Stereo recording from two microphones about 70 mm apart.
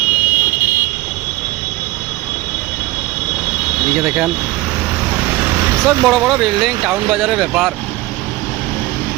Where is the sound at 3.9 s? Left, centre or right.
Centre.